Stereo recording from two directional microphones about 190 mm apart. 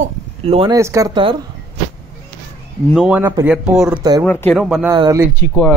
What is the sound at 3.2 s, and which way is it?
Speech, 10° right (ahead or behind).